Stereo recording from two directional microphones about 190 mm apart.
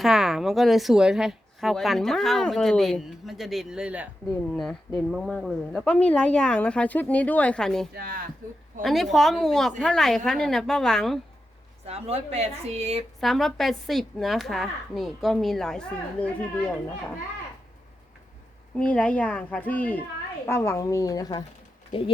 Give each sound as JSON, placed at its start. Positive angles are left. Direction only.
{"t": 0.0, "sound": "a woman's voice", "side_deg": 0}
{"t": 7.9, "sound": "speech", "side_deg": -50}
{"t": 8.8, "sound": "a woman's voice", "side_deg": 0}
{"t": 11.9, "sound": "speech", "side_deg": -30}
{"t": 13.1, "sound": "a woman's voice", "side_deg": 0}
{"t": 18.8, "sound": "speech", "side_deg": 5}